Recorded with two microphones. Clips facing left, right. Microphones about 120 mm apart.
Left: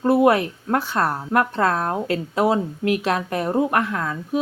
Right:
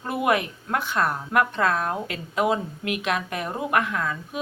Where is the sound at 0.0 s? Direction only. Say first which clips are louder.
Left 7 dB; 30° left (ahead or behind).